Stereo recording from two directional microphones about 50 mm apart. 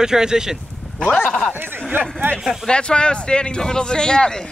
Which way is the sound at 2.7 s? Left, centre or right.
Centre.